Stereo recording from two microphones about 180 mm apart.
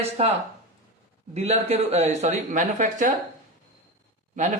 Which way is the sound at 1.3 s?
35° right (ahead or behind).